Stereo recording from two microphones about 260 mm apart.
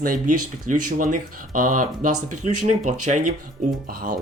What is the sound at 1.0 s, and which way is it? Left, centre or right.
Speech, right.